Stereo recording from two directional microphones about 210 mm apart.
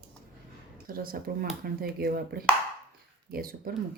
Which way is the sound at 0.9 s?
45° right (ahead or behind).